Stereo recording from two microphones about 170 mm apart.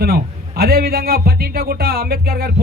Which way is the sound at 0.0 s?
65° right (ahead or behind).